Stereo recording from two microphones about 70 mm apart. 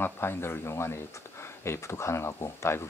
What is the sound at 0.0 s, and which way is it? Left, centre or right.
Speech, left.